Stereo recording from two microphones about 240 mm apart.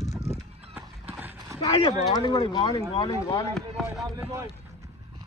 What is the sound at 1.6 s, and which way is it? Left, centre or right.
Speech, left.